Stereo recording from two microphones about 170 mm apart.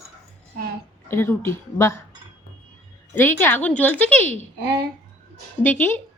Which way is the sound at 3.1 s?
10° left (ahead or behind).